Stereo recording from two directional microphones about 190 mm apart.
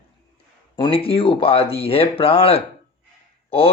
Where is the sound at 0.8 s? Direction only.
30° left (ahead or behind).